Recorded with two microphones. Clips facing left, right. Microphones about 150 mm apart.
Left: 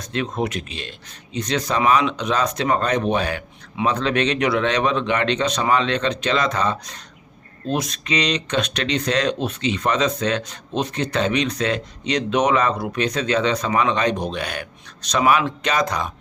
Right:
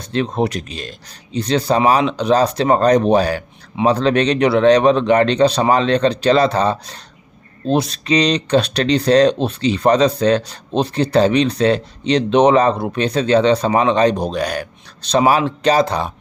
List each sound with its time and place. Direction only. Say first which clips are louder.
0.0 s speech: right 5 dB; 30° right (ahead or behind)